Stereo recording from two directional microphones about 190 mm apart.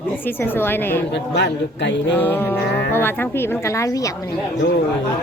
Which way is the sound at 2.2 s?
10° left (ahead or behind).